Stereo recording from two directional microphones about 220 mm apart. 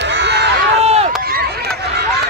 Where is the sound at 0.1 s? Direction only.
50° right (ahead or behind).